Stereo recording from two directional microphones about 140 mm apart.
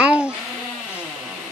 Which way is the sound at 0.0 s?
10° right (ahead or behind).